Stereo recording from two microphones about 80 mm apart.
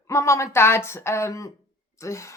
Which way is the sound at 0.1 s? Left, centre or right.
Left.